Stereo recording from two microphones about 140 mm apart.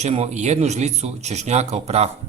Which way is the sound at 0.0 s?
50° right (ahead or behind).